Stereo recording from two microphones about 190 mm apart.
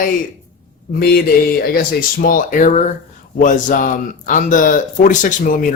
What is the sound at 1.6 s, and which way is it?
Speech, 50° left (ahead or behind).